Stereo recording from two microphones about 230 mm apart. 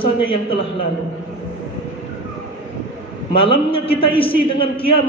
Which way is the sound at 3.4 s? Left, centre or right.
Left.